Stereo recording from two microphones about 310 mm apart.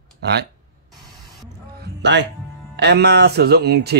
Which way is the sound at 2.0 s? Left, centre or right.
Right.